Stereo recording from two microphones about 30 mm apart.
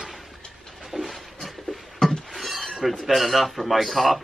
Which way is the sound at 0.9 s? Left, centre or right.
Centre.